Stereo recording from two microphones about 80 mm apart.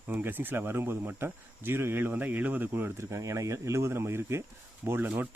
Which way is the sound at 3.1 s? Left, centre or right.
Right.